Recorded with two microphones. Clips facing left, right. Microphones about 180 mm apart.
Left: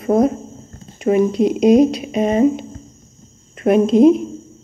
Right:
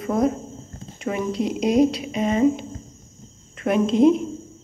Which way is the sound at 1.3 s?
20° left (ahead or behind).